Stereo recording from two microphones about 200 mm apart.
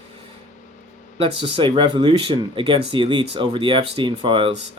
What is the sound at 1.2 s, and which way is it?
Speech, 25° right (ahead or behind).